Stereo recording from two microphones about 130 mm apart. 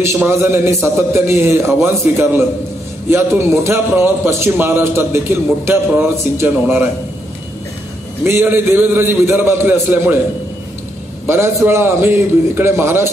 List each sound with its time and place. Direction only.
0.0 s a man's voice: 20° right (ahead or behind)
8.3 s a man's voice: 20° right (ahead or behind)
11.2 s a man's voice: 20° right (ahead or behind)